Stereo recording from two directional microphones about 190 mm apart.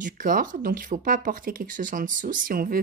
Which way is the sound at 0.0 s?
45° right (ahead or behind).